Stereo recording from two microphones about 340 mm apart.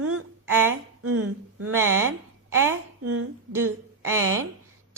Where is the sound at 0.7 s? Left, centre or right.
Right.